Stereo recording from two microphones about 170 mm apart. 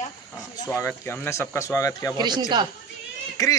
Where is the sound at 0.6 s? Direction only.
15° left (ahead or behind).